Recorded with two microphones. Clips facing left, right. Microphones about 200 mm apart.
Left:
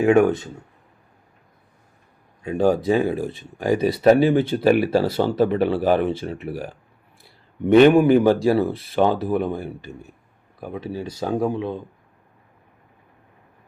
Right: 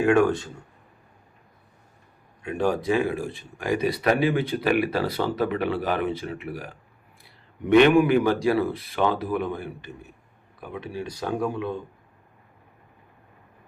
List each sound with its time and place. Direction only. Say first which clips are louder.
0.0 s speech: left 4 dB; 20° left (ahead or behind)
2.6 s speech: left 5 dB; 35° left (ahead or behind)
9.9 s speech: left 4 dB; 40° left (ahead or behind)
10.6 s speech: left 4 dB; 25° left (ahead or behind)